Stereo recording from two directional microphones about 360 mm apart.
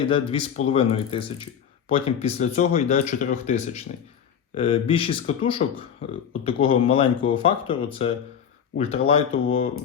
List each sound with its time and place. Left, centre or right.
0.0 s speech: centre